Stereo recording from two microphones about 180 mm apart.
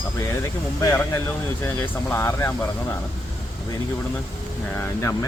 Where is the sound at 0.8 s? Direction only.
15° left (ahead or behind).